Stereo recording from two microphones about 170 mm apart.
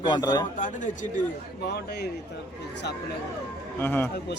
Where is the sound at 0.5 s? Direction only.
45° left (ahead or behind).